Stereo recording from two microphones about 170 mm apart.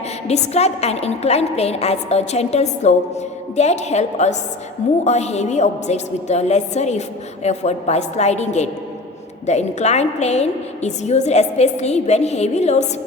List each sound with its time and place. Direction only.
0.3 s a woman's voice: 40° left (ahead or behind)